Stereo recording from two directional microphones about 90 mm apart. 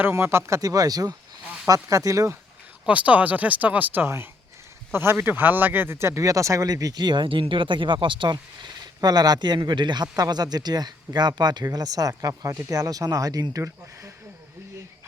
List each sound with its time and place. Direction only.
0.0 s speech: 25° right (ahead or behind)
2.8 s speech: 15° right (ahead or behind); by 13.6 s 45° right (ahead or behind)
13.6 s speech: 35° right (ahead or behind)